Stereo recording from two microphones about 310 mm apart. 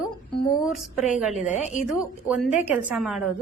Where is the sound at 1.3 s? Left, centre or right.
Left.